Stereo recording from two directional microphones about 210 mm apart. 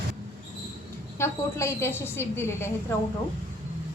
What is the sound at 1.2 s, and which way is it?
A woman's voice, 10° left (ahead or behind).